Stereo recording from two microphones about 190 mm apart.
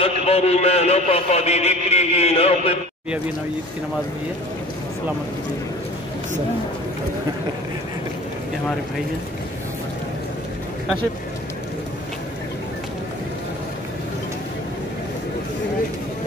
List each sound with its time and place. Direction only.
0.0 s a man's voice: 35° left (ahead or behind)